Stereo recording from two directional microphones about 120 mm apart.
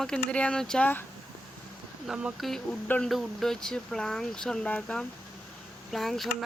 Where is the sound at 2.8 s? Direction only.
10° left (ahead or behind).